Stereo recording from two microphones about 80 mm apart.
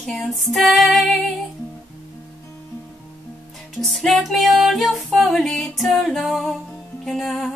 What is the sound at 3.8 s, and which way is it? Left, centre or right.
Music, centre.